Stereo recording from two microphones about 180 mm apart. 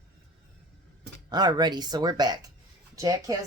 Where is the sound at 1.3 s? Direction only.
25° right (ahead or behind).